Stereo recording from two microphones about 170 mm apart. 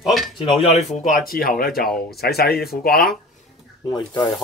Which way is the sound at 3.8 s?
25° left (ahead or behind).